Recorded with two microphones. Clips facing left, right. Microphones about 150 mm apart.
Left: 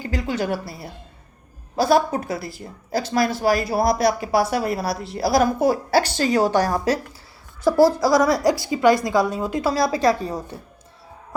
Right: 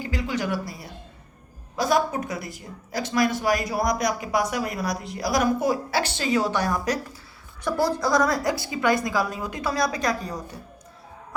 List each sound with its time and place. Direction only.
0.0 s a woman's voice: 35° left (ahead or behind)